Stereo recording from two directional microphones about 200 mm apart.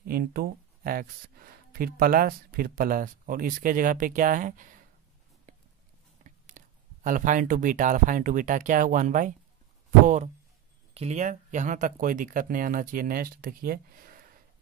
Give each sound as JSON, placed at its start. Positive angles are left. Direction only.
{"t": 0.0, "sound": "speech", "side_deg": -50}
{"t": 6.2, "sound": "speech", "side_deg": -40}